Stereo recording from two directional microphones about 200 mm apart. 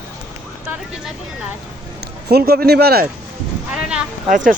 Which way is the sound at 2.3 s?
50° right (ahead or behind).